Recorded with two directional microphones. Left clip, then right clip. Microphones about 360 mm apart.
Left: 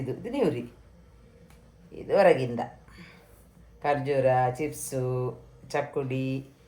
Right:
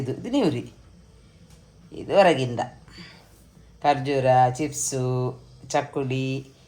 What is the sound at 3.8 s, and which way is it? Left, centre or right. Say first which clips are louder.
Speech: right 3 dB; centre.